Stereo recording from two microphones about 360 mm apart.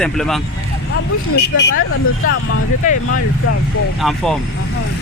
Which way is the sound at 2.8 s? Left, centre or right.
Left.